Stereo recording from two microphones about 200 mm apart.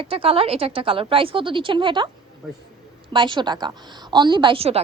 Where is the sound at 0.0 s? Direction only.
25° right (ahead or behind).